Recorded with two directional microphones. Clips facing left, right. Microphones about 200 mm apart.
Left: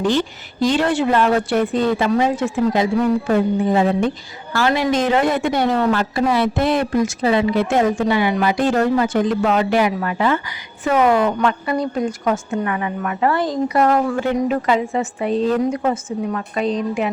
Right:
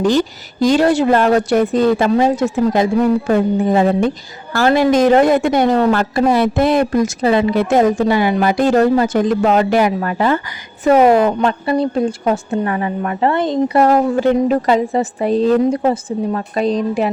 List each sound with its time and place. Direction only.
0.0 s a woman's voice: 40° right (ahead or behind)